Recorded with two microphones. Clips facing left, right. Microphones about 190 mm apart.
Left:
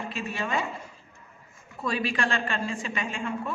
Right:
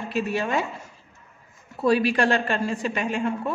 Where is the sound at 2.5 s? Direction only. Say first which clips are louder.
Right 6 dB; 65° right (ahead or behind).